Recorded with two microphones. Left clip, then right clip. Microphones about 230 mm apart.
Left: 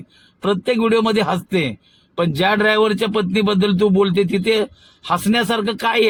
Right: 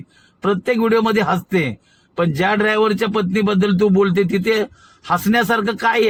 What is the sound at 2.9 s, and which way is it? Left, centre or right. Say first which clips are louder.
Speech: even; right.